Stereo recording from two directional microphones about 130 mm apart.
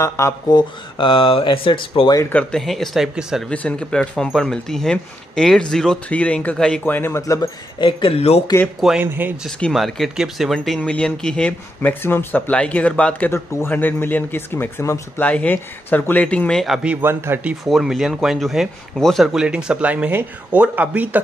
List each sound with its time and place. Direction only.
0.0 s speech: 30° left (ahead or behind)
2.1 s speech: 15° left (ahead or behind)
2.5 s speech: centre (ahead or behind)
3.4 s speech: 10° left (ahead or behind)
7.8 s speech: 45° left (ahead or behind)
9.0 s speech: 15° right (ahead or behind)
9.6 s speech: centre (ahead or behind)